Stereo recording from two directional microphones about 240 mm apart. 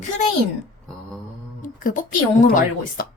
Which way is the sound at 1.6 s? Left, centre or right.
Left.